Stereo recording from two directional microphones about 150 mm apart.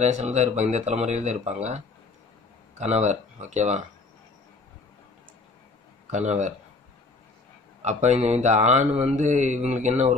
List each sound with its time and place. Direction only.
0.0 s speech: 50° right (ahead or behind)
2.8 s speech: 50° right (ahead or behind)
6.1 s speech: 50° right (ahead or behind)
7.8 s speech: 50° right (ahead or behind)